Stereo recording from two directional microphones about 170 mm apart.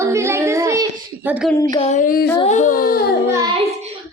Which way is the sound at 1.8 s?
45° left (ahead or behind).